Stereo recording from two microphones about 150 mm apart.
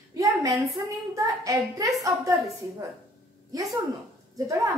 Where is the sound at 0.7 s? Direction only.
25° right (ahead or behind).